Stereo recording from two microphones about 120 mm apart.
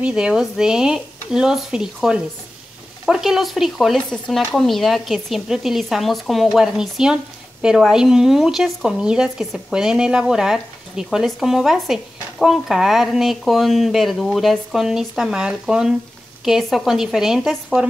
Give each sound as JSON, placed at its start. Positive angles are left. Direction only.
{"t": 0.0, "sound": "speech", "side_deg": -5}